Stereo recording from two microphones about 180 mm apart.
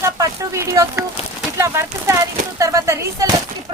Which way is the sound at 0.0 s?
15° right (ahead or behind).